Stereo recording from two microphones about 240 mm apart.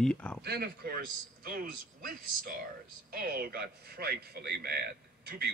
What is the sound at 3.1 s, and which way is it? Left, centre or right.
A man's voice, right.